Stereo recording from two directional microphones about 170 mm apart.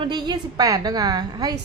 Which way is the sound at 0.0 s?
25° right (ahead or behind).